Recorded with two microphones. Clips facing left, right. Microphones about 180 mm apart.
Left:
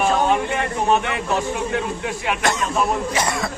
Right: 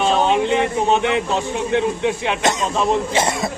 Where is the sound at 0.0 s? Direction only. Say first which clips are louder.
Right 2 dB; 20° right (ahead or behind).